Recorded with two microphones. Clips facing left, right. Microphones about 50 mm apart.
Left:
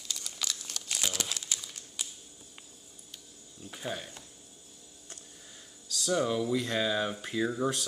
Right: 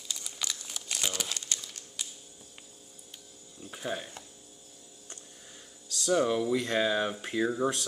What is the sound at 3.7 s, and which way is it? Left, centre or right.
Speech, centre.